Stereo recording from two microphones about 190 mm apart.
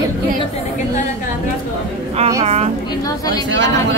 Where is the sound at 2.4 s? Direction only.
35° right (ahead or behind).